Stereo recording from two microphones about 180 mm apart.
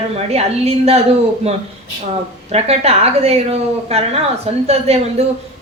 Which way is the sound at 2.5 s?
35° right (ahead or behind).